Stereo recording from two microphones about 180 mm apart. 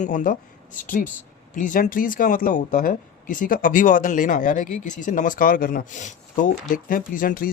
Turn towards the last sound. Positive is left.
turn(degrees=50)  # may be behind; listen again after turning